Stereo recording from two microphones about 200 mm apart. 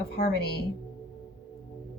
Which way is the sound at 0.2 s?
55° left (ahead or behind).